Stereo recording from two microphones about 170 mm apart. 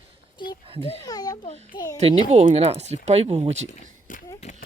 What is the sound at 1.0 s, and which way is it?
Speech, 20° left (ahead or behind).